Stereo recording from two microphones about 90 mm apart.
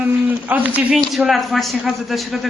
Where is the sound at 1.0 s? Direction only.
Centre (ahead or behind).